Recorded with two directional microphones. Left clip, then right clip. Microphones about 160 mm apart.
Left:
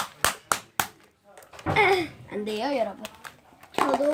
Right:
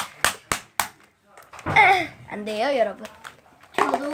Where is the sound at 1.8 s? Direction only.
35° right (ahead or behind).